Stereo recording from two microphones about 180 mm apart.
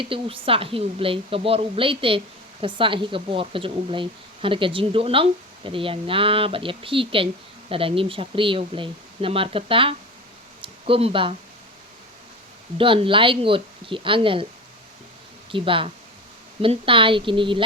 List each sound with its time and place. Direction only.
0.0 s a woman's voice: 30° right (ahead or behind)
10.6 s a sound: 30° right (ahead or behind)
12.7 s a woman's voice: 30° right (ahead or behind)
15.5 s a woman's voice: 30° right (ahead or behind)